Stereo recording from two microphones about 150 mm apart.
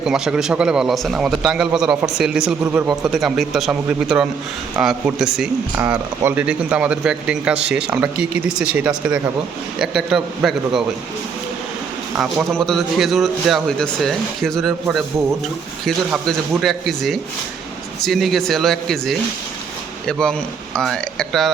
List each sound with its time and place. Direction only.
0.0 s a man's voice: 5° right (ahead or behind)
12.1 s a man's voice: 5° right (ahead or behind)
16.1 s a man's voice: centre (ahead or behind)